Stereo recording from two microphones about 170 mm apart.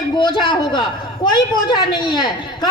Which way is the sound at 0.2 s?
25° left (ahead or behind).